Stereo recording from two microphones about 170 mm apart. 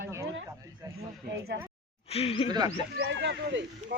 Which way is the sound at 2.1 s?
35° left (ahead or behind).